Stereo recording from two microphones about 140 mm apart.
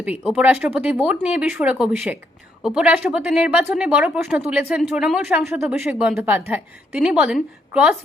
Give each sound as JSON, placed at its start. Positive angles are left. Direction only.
{"t": 0.0, "sound": "speech", "side_deg": -10}